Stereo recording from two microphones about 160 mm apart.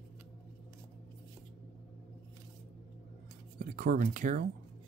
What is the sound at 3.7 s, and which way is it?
Speech, 55° right (ahead or behind).